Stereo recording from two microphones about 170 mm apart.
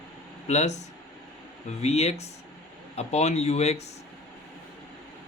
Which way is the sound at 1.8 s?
40° left (ahead or behind).